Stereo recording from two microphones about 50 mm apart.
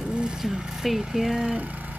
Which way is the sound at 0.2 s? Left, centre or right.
Centre.